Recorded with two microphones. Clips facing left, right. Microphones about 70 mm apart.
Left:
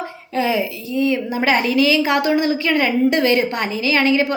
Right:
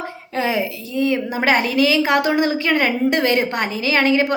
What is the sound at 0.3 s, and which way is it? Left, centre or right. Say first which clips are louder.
A woman's voice: left 1 dB; right.